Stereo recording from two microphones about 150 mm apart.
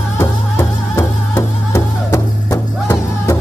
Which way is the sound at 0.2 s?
20° left (ahead or behind).